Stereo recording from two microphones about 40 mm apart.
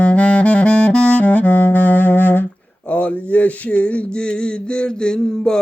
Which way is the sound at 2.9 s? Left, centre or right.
Left.